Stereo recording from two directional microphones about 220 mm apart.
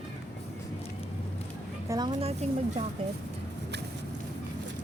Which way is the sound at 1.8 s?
20° right (ahead or behind).